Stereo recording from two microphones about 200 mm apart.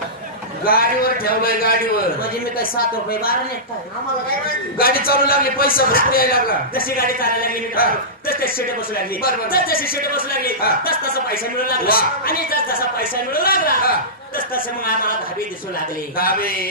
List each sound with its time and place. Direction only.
0.7 s a man's voice: 50° left (ahead or behind)
4.7 s a man's voice: 50° left (ahead or behind)
16.2 s a man's voice: 45° left (ahead or behind)